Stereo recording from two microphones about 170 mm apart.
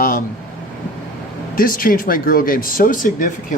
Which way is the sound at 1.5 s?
55° left (ahead or behind).